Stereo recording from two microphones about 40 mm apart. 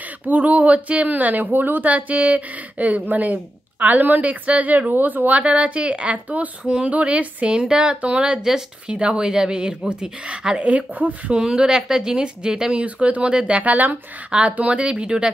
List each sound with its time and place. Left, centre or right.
0.2 s speech: right
1.9 s a woman's voice: right
5.3 s a woman's voice: right
6.6 s a woman's voice: right
7.6 s a woman's voice: centre
9.2 s a woman's voice: centre
10.6 s a woman's voice: right
11.3 s a woman's voice: right
12.8 s a woman's voice: right
13.7 s speech: right
14.3 s a woman's voice: right